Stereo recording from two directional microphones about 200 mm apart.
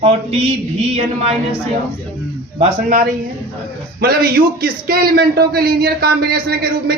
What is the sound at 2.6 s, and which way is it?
A man's voice, 40° right (ahead or behind).